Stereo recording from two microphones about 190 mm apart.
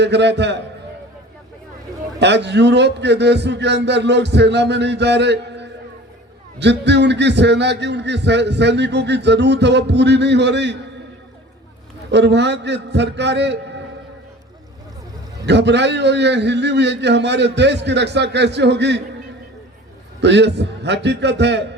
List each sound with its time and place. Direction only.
0.0 s a man's voice: 65° right (ahead or behind)
2.1 s a man's voice: 65° right (ahead or behind)
12.1 s a man's voice: 65° right (ahead or behind)
15.4 s a man's voice: 65° right (ahead or behind)
20.2 s a man's voice: 65° right (ahead or behind)